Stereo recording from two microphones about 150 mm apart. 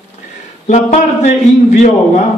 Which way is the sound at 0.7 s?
50° left (ahead or behind).